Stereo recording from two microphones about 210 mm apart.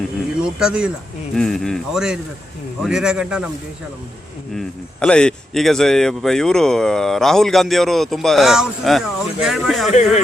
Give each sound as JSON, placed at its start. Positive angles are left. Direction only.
{"t": 0.4, "sound": "a man's voice", "side_deg": -5}
{"t": 4.5, "sound": "a man's voice", "side_deg": 5}
{"t": 9.9, "sound": "speech", "side_deg": 35}